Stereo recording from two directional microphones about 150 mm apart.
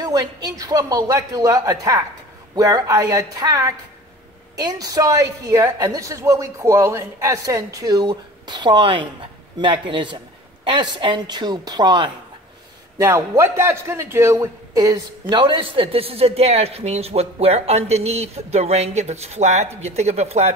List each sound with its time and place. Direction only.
0.0 s a woman's voice: 25° right (ahead or behind)
12.9 s a man's voice: 20° right (ahead or behind); by 20.5 s 45° right (ahead or behind)